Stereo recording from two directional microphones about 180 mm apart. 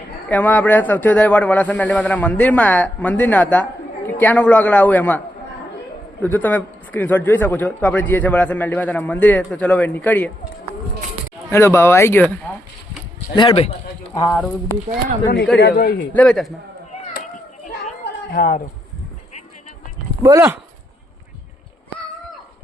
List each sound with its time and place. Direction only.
0.3 s a man's voice: 10° left (ahead or behind)
6.2 s a man's voice: 10° left (ahead or behind)
11.5 s a man's voice: 15° left (ahead or behind)
13.3 s a man's voice: 30° left (ahead or behind)
14.2 s a man's voice: 10° left (ahead or behind)
15.5 s a man's voice: 70° left (ahead or behind)
16.1 s a man's voice: 5° left (ahead or behind)
18.3 s speech: 50° left (ahead or behind)
20.2 s speech: 15° right (ahead or behind)